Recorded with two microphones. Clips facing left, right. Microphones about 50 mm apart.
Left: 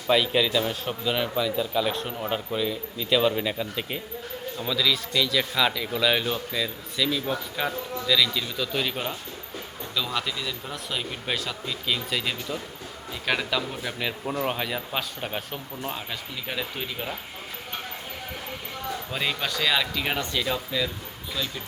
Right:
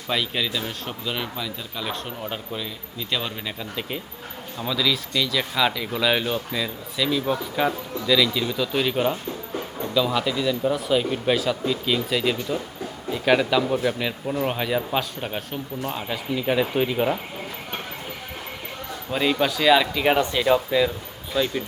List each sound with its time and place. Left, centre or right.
0.1 s speech: centre
16.0 s speech: centre
19.1 s speech: centre